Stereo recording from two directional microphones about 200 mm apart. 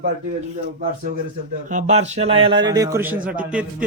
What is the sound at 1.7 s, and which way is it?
A man's voice, 35° right (ahead or behind).